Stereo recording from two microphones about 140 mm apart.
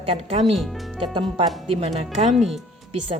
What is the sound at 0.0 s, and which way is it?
A woman's voice, 45° right (ahead or behind).